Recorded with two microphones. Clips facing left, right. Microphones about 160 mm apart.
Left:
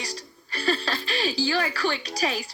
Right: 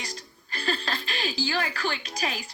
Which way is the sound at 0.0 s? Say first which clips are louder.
Left 3 dB; 35° left (ahead or behind).